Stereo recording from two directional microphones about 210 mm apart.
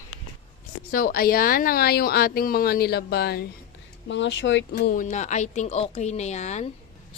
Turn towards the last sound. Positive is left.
turn(degrees=30)  # may be behind; listen again after turning